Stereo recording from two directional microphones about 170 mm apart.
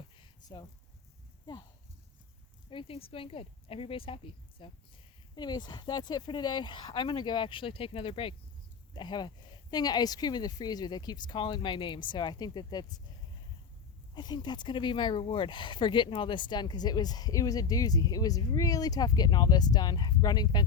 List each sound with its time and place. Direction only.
0.2 s a sound: 25° left (ahead or behind)
2.6 s speech: 35° left (ahead or behind)
14.2 s speech: 25° left (ahead or behind)